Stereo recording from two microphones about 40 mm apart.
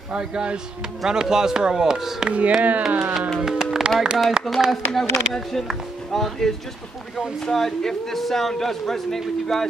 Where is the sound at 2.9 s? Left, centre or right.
Right.